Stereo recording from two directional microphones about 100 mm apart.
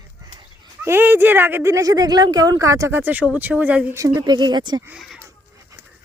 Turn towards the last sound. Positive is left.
turn(degrees=0)  # may be behind; listen again after turning